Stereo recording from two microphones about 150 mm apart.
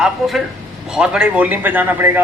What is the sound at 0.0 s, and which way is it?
A man's voice, centre (ahead or behind).